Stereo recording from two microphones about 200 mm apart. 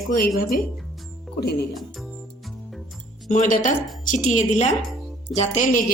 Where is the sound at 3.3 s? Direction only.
40° left (ahead or behind).